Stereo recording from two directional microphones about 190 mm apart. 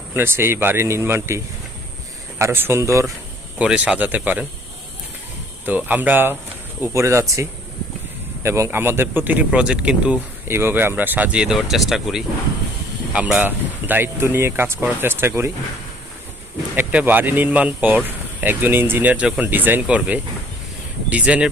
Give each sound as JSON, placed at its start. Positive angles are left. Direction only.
{"t": 0.1, "sound": "speech", "side_deg": -10}
{"t": 2.4, "sound": "speech", "side_deg": -10}
{"t": 5.6, "sound": "speech", "side_deg": -10}
{"t": 8.4, "sound": "speech", "side_deg": -15}
{"t": 16.7, "sound": "speech", "side_deg": -10}